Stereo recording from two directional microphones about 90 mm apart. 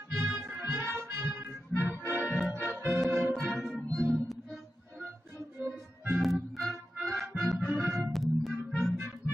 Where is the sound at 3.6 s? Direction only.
Centre (ahead or behind).